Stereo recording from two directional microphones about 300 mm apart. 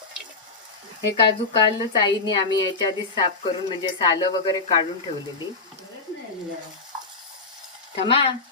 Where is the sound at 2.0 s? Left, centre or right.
Centre.